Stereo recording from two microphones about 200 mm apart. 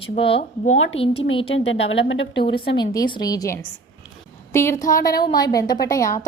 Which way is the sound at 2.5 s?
25° left (ahead or behind).